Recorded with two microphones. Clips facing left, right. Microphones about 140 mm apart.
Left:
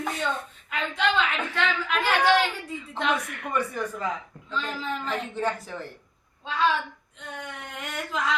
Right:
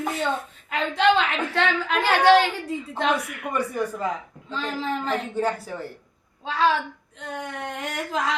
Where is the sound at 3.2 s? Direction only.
5° right (ahead or behind).